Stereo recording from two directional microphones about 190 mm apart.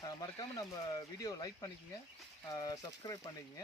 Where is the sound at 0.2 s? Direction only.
20° left (ahead or behind).